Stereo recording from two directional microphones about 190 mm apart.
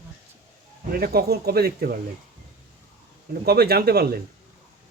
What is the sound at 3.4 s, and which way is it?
Speech, 55° right (ahead or behind).